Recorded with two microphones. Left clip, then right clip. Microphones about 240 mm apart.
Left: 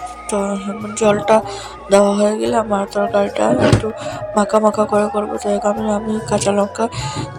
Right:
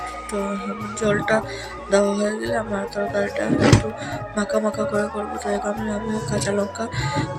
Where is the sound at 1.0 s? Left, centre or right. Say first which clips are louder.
Left 7 dB; left.